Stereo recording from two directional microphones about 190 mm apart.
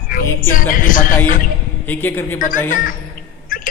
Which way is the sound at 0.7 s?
45° left (ahead or behind).